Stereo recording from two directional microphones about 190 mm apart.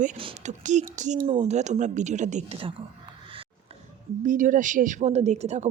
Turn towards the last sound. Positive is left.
turn(degrees=-35)  # may be behind; listen again after turning